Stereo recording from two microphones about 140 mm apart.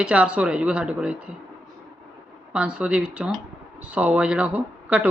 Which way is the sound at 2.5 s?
10° right (ahead or behind).